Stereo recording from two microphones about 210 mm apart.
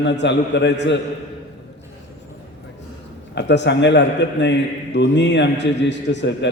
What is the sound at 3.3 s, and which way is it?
A man's voice, 55° left (ahead or behind).